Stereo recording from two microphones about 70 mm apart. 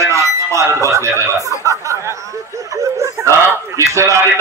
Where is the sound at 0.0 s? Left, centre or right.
Right.